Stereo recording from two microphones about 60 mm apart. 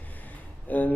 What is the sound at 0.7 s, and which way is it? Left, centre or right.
Speech, left.